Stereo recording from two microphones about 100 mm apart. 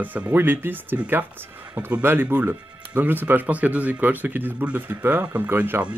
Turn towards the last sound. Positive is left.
turn(degrees=-20)  # may be behind; listen again after turning